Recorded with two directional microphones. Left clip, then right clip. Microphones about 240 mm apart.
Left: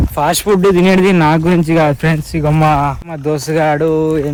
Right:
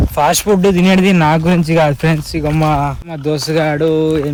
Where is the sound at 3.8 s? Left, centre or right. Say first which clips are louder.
Even; centre.